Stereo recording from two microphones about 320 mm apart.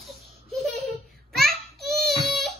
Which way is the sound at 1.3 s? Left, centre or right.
Centre.